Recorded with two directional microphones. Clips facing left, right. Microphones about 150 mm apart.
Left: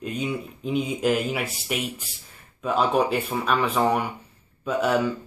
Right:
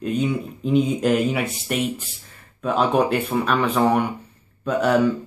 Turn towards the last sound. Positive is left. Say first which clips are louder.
# right 3 dB
turn(degrees=0)  # may be behind; listen again after turning